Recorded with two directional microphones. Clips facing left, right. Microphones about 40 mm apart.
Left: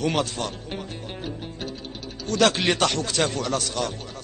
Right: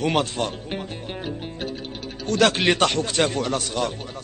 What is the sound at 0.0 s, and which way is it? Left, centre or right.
Music, right.